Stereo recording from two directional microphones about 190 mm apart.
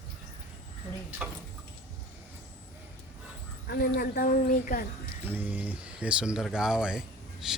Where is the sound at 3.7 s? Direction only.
55° left (ahead or behind).